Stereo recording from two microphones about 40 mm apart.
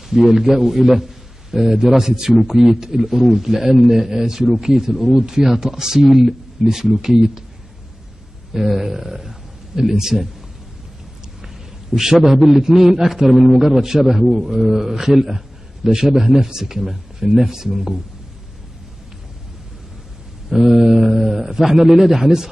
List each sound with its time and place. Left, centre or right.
0.1 s a man's voice: centre
8.5 s a sound: centre
9.8 s a man's voice: centre
12.0 s a man's voice: centre
20.4 s a man's voice: centre